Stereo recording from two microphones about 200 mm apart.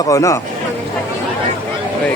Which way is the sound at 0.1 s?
15° left (ahead or behind).